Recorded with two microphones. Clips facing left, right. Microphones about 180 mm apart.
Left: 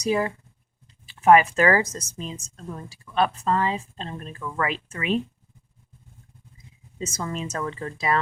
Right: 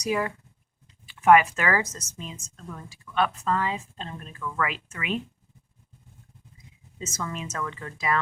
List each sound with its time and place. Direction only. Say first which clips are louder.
0.0 s a woman's voice: left 3 dB; 30° left (ahead or behind)
7.0 s a woman's voice: left 4 dB; 35° left (ahead or behind)